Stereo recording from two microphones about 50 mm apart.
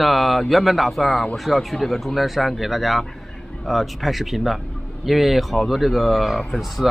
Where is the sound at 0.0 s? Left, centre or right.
Centre.